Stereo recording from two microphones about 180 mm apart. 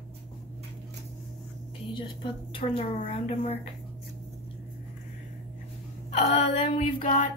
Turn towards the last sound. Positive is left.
turn(degrees=45)  # may be behind; listen again after turning